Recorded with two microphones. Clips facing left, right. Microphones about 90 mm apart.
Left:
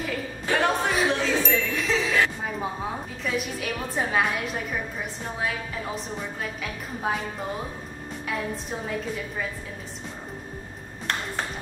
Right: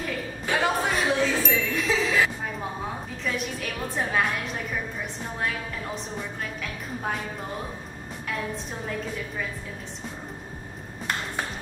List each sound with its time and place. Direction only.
0.0 s a sound: 5° right (ahead or behind)
3.3 s a woman's voice: 5° left (ahead or behind)
8.8 s a woman's voice: centre (ahead or behind)